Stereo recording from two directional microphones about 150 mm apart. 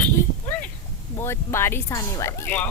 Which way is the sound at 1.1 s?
15° left (ahead or behind).